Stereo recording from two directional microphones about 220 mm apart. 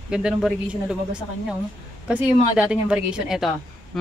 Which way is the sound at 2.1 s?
5° right (ahead or behind).